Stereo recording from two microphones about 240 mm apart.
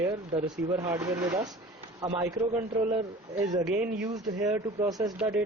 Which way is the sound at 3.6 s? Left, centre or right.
Centre.